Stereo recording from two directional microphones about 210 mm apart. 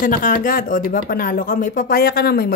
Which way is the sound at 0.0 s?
40° left (ahead or behind).